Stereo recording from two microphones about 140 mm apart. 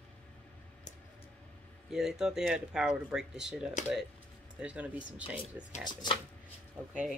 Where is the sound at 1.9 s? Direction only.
5° right (ahead or behind).